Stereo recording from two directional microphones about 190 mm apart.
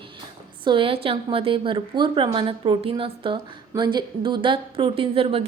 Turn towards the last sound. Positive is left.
turn(degrees=-30)  # may be behind; listen again after turning